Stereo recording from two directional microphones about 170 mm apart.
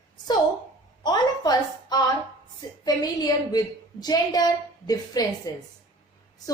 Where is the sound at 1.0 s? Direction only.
25° left (ahead or behind).